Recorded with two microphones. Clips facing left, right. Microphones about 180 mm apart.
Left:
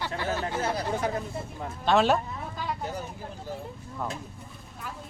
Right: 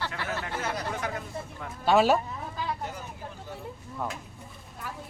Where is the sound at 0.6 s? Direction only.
30° left (ahead or behind).